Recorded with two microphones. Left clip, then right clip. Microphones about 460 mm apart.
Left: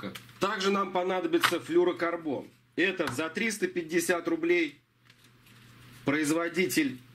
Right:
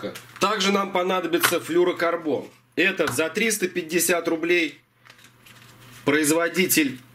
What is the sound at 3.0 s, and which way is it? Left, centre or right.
Speech, centre.